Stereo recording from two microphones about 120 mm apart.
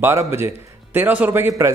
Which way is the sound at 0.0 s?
20° right (ahead or behind).